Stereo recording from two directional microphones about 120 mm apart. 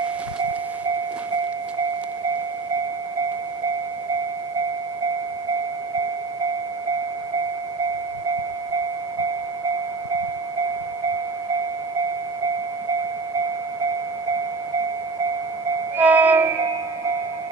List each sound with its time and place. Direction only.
16.0 s music: 15° right (ahead or behind)